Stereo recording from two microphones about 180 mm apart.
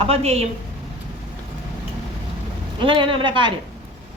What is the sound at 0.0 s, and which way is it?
Speech, 35° right (ahead or behind).